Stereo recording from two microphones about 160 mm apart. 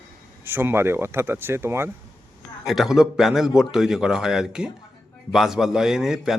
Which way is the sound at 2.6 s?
Centre (ahead or behind).